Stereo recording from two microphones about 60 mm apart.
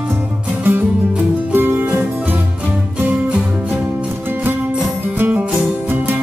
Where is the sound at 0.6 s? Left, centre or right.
Right.